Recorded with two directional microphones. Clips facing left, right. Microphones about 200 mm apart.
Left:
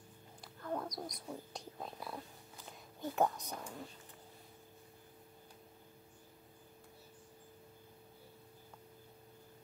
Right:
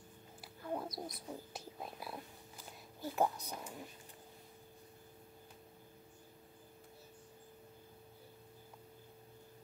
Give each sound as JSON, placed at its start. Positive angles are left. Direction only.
{"t": 0.4, "sound": "a woman's voice", "side_deg": -5}